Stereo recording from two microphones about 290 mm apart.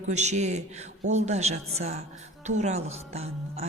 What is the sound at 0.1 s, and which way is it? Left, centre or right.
A woman's voice, right.